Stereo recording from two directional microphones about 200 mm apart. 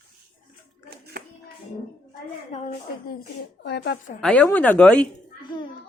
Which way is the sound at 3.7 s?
55° left (ahead or behind).